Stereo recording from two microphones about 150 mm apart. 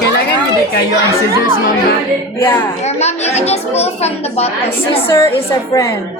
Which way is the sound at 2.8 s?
45° left (ahead or behind).